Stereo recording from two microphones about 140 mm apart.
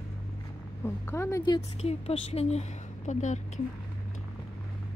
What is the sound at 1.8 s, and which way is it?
A woman's voice, 50° left (ahead or behind).